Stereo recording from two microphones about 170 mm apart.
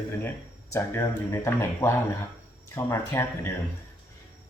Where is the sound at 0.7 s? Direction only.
15° left (ahead or behind).